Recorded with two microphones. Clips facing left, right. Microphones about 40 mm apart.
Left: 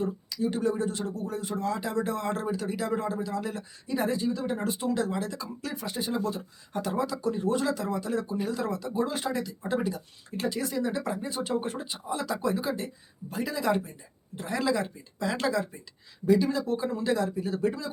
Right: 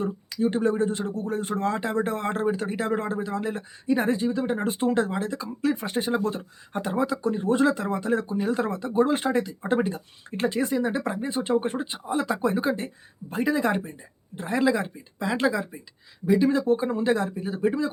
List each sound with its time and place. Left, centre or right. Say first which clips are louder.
0.0 s speech: right 4 dB; right; by 16.5 s centre
16.5 s speech: right 6 dB; right